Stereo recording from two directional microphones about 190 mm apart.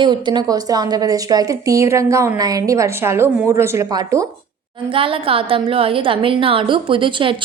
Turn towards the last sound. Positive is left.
turn(degrees=-25)  # may be behind; listen again after turning